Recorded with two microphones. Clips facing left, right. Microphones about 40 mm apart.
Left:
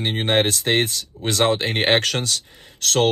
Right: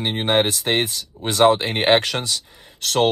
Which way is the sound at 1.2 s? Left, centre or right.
Right.